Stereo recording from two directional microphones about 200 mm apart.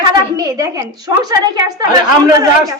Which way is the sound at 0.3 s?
15° right (ahead or behind).